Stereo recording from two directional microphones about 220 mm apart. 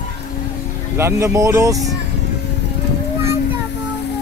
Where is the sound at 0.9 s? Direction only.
10° right (ahead or behind).